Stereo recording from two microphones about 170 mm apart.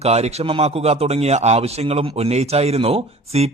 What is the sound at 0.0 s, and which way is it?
A man's voice, 40° right (ahead or behind).